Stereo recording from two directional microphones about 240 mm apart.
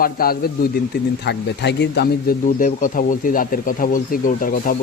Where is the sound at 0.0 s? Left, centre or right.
Left.